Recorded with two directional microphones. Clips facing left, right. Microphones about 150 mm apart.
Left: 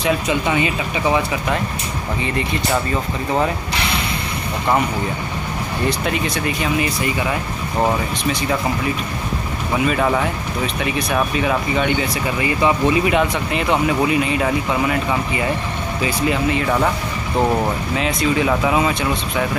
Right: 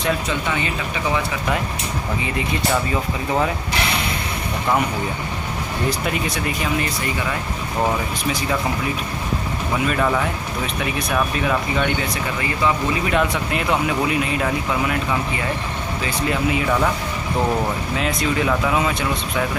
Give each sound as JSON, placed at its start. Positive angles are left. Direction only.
{"t": 0.3, "sound": "speech", "side_deg": 15}
{"t": 2.2, "sound": "speech", "side_deg": -5}
{"t": 5.9, "sound": "speech", "side_deg": -5}
{"t": 8.3, "sound": "speech", "side_deg": 0}
{"t": 13.1, "sound": "speech", "side_deg": 0}
{"t": 16.3, "sound": "speech", "side_deg": -5}
{"t": 17.9, "sound": "speech", "side_deg": 0}